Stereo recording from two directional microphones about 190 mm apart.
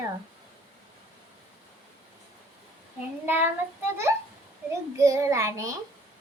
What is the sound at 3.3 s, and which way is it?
Child singing, 10° right (ahead or behind).